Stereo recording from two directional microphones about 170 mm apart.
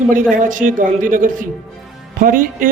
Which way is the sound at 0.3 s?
50° right (ahead or behind).